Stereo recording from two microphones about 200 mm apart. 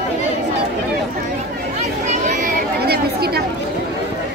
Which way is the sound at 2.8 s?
50° right (ahead or behind).